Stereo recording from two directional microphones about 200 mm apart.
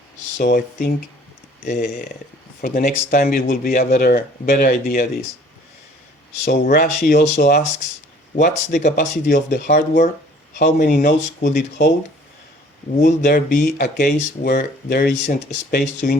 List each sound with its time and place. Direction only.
0.4 s speech: 50° left (ahead or behind)
1.6 s speech: 40° left (ahead or behind)
6.4 s speech: 50° left (ahead or behind)
13.0 s speech: 45° left (ahead or behind)